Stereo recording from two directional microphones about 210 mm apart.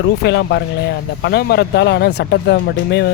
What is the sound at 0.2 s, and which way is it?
Speech, 55° left (ahead or behind).